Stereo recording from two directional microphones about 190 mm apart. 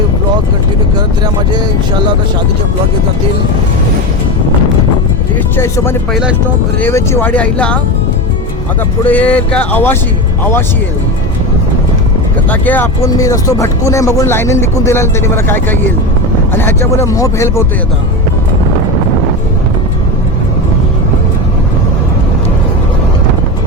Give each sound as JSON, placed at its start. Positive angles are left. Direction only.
{"t": 5.5, "sound": "speech", "side_deg": 15}
{"t": 9.0, "sound": "speech", "side_deg": 10}
{"t": 12.5, "sound": "speech", "side_deg": 10}